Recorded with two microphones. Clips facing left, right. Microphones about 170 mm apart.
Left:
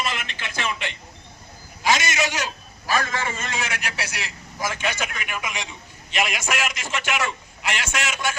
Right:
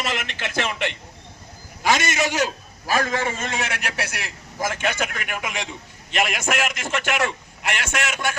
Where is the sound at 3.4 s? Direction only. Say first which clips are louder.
Right 2 dB; 60° right (ahead or behind).